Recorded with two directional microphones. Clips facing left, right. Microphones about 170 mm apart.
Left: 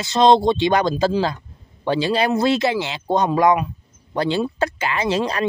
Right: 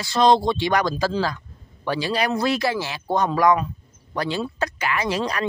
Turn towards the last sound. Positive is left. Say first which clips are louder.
# left 3 dB
turn(degrees=25)  # may be behind; listen again after turning